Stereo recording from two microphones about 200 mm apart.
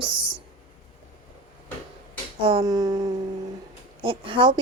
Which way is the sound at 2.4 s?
20° right (ahead or behind).